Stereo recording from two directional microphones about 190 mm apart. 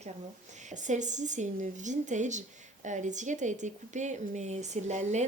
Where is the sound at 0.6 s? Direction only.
40° right (ahead or behind).